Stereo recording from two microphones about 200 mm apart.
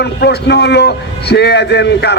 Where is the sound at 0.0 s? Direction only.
55° left (ahead or behind).